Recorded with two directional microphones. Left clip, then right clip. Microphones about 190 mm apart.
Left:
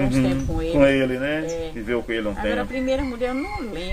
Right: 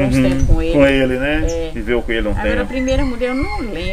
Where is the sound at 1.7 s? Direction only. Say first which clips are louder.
Right 6 dB; 10° right (ahead or behind).